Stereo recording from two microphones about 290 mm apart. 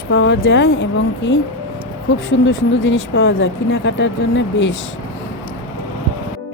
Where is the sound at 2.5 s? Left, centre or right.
Left.